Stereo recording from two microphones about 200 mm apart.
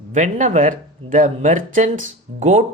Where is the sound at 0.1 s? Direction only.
40° right (ahead or behind).